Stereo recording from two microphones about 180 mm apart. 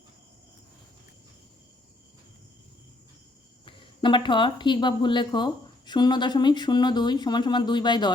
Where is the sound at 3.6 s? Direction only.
30° left (ahead or behind).